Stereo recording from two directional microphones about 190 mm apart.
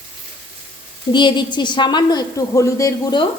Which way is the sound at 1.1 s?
25° left (ahead or behind).